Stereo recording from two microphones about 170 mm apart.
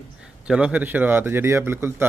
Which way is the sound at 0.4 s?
5° right (ahead or behind).